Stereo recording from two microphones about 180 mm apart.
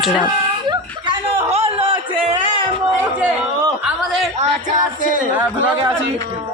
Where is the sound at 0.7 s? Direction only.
30° right (ahead or behind).